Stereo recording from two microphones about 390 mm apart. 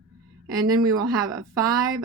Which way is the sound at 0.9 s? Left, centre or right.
Centre.